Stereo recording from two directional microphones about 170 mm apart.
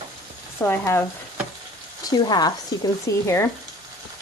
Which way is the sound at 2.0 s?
25° left (ahead or behind).